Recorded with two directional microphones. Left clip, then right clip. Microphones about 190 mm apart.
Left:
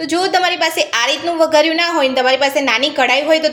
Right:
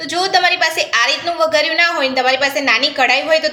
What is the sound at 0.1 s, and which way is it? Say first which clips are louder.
A woman's voice: right 1 dB; 30° left (ahead or behind).